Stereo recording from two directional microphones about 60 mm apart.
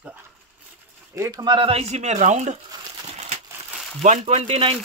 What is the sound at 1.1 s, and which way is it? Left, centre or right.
Speech, right.